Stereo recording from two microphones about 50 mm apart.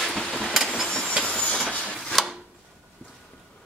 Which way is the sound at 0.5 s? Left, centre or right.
Centre.